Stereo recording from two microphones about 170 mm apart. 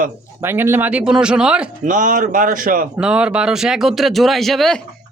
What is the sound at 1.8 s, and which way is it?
A man's voice, 50° right (ahead or behind).